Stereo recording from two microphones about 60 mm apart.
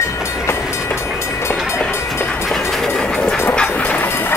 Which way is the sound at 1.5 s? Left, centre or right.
Centre.